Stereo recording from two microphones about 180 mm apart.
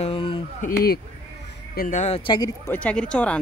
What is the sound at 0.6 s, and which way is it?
Speech, 55° left (ahead or behind).